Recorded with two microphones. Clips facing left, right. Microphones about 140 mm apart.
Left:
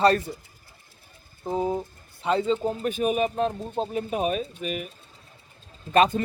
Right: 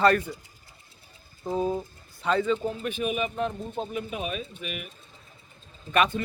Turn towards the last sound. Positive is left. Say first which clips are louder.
# left 4 dB
turn(degrees=30)  # may be behind; listen again after turning